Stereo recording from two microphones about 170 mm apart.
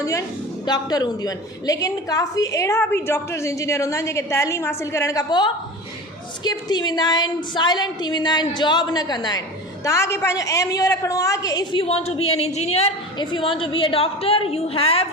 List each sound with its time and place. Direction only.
0.0 s a woman's voice: 20° left (ahead or behind)